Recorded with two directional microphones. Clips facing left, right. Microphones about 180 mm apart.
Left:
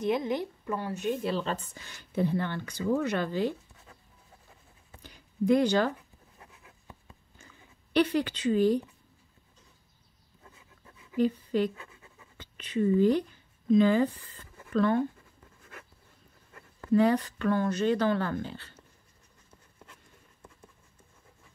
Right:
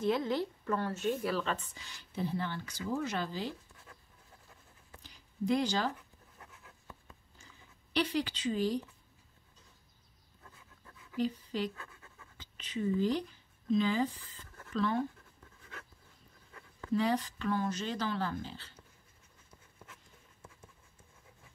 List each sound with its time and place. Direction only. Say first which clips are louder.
0.0 s speech: left 2 dB; 15° left (ahead or behind); by 3.5 s 60° left (ahead or behind)
5.0 s a sound: left 7 dB; 55° left (ahead or behind)
6.4 s writing: left 1 dB; 15° left (ahead or behind)
7.3 s a sound: left 4 dB; 55° left (ahead or behind)
10.4 s a sound: left 2 dB; 20° left (ahead or behind)
11.1 s speech: left 8 dB; 55° left (ahead or behind)
11.7 s pant: left 2 dB; 15° left (ahead or behind)
12.4 s speech: left 8 dB; 60° left (ahead or behind)
15.4 s writing: left 1 dB; 5° left (ahead or behind)
16.9 s speech: left 7 dB; 55° left (ahead or behind)